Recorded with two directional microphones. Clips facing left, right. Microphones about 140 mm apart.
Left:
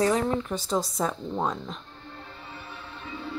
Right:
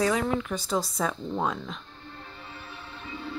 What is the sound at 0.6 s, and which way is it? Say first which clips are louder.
Speech: left 1 dB; centre (ahead or behind).